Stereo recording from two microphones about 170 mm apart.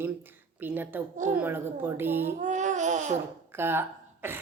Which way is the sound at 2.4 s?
45° right (ahead or behind).